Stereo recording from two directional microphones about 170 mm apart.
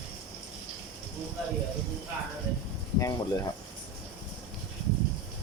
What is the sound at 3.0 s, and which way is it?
Speech, 20° left (ahead or behind).